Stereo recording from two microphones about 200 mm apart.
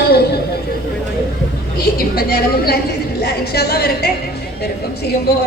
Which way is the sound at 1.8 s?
50° left (ahead or behind).